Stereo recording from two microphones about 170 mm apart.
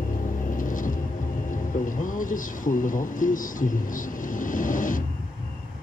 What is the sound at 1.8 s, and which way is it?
Speech, 50° left (ahead or behind).